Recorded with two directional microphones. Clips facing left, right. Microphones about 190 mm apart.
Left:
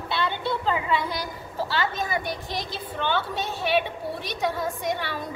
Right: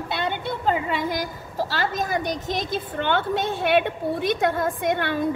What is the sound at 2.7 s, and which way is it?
A woman's voice, 55° right (ahead or behind).